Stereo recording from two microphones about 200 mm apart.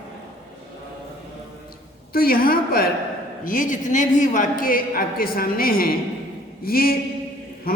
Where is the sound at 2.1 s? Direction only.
45° left (ahead or behind).